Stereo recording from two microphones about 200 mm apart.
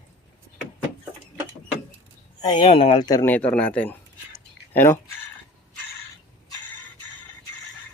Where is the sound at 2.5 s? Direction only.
25° left (ahead or behind).